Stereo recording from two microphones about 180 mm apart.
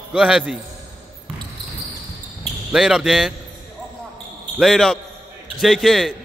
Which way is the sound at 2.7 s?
Centre (ahead or behind).